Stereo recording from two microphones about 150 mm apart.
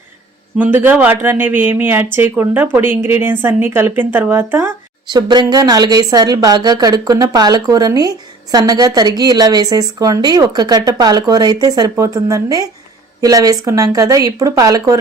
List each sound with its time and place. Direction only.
0.6 s speech: 10° right (ahead or behind)
5.0 s a woman's voice: 30° right (ahead or behind)